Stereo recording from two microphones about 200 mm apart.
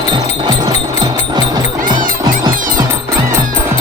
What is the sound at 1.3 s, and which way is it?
Music, 20° right (ahead or behind).